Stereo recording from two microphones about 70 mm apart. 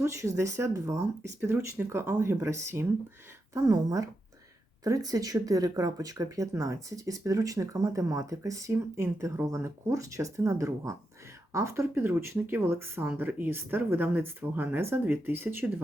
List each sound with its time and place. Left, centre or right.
0.0 s speech: right
3.5 s a woman's voice: right